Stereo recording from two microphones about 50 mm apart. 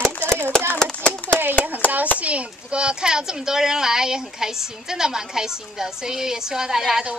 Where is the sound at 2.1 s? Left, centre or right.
Right; by 7.1 s centre.